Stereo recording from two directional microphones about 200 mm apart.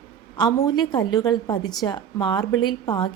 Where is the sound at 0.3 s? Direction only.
20° left (ahead or behind).